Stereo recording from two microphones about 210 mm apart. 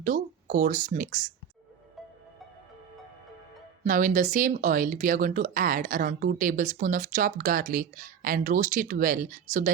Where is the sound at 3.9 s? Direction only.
40° right (ahead or behind).